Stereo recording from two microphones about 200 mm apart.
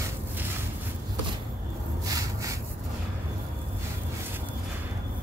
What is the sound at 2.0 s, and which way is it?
Snort, 15° right (ahead or behind).